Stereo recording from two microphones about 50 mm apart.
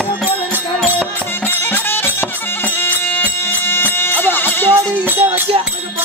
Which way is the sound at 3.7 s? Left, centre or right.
Left.